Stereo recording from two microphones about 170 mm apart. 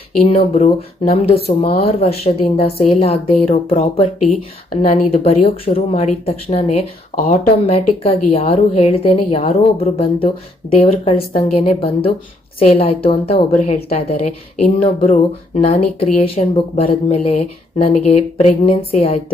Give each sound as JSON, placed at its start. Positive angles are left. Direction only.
{"t": 0.2, "sound": "a woman's voice", "side_deg": 40}